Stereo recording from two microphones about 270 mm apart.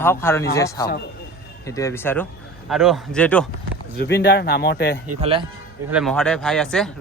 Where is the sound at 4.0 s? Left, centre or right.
Left.